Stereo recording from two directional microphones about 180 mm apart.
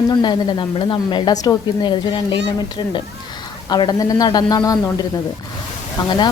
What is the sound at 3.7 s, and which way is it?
A woman's voice, 20° left (ahead or behind).